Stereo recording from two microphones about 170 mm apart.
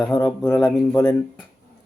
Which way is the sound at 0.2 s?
10° left (ahead or behind).